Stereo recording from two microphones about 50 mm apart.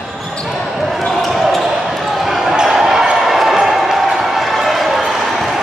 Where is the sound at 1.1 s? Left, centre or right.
Centre.